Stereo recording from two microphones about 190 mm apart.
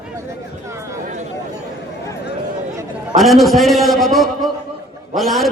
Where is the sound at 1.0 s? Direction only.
40° right (ahead or behind).